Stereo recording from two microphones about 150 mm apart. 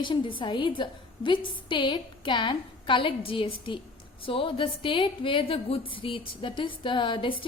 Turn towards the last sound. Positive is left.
turn(degrees=35)  # may be behind; listen again after turning